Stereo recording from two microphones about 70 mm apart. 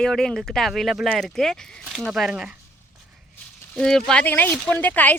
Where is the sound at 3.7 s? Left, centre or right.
Centre.